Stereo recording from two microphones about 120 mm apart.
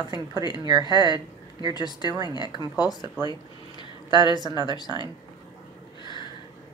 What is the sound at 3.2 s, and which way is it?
Speech, 15° right (ahead or behind).